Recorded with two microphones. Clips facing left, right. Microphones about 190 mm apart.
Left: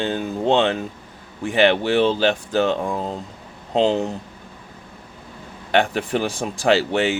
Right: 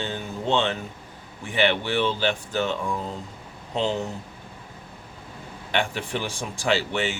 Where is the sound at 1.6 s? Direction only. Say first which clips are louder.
Left 6 dB; 40° left (ahead or behind).